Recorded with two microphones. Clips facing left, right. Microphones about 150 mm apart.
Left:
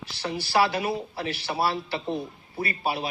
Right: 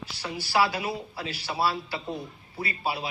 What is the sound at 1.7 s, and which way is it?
Speech, 25° left (ahead or behind).